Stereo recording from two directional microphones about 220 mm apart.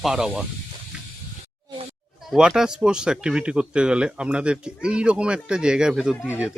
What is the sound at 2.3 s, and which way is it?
Speech, centre (ahead or behind).